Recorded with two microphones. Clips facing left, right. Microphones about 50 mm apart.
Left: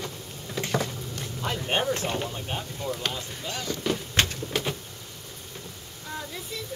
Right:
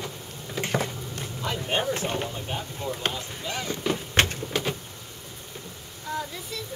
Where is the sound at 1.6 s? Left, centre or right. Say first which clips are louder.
Even; centre.